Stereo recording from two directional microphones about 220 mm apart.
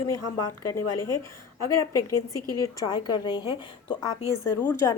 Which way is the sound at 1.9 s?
90° left.